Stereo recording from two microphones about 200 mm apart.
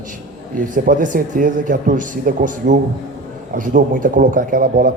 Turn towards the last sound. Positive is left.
turn(degrees=-45)  # may be behind; listen again after turning